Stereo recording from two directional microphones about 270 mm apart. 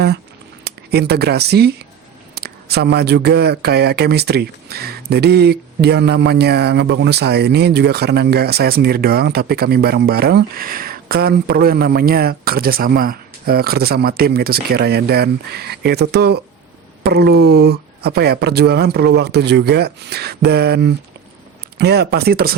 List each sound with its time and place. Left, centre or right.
0.6 s speech: right